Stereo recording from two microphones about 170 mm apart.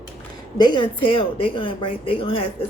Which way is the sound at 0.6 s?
25° left (ahead or behind).